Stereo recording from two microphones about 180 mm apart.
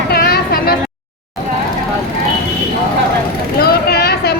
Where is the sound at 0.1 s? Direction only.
55° left (ahead or behind).